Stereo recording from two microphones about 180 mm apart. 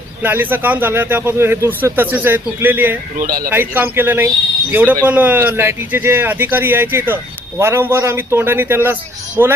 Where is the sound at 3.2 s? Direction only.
50° right (ahead or behind).